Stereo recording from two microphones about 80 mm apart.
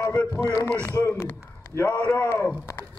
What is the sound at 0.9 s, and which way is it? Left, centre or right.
Speech, left.